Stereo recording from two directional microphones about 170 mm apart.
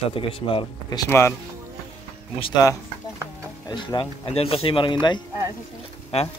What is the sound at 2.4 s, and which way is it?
Speech, 20° left (ahead or behind).